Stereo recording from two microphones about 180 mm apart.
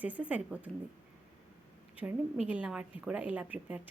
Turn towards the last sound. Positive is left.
turn(degrees=-10)  # may be behind; listen again after turning